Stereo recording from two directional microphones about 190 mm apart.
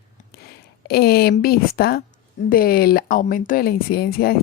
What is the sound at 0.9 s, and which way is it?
A woman's voice, 55° left (ahead or behind).